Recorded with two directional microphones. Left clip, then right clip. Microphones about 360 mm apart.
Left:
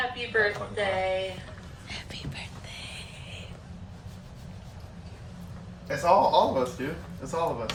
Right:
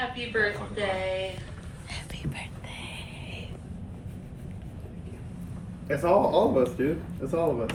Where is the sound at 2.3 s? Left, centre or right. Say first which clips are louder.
Right 1 dB; centre.